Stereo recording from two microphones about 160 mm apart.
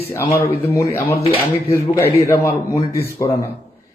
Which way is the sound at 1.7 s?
15° left (ahead or behind).